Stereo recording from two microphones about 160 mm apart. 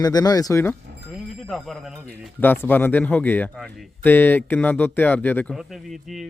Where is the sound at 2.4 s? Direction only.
10° left (ahead or behind).